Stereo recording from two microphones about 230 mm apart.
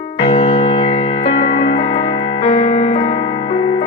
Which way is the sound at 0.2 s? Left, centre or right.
Left.